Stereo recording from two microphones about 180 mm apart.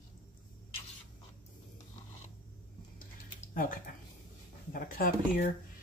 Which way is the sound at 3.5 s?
50° left (ahead or behind).